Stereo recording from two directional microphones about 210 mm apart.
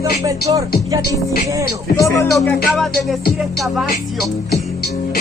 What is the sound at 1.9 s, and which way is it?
Music, 15° left (ahead or behind).